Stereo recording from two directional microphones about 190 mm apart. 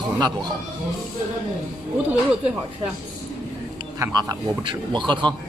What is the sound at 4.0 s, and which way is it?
Speech, 20° right (ahead or behind).